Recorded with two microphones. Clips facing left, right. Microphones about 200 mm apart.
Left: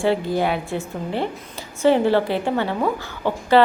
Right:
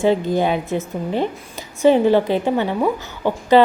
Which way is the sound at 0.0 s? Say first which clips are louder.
Right 3 dB; 20° right (ahead or behind).